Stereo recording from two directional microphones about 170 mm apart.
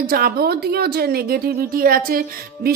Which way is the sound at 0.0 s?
60° right (ahead or behind).